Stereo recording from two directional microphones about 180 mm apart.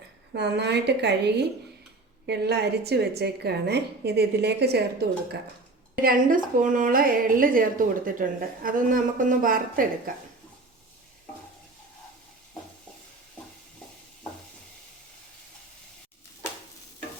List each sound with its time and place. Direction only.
0.3 s a woman's voice: 70° right (ahead or behind)
6.0 s a woman's voice: 50° right (ahead or behind)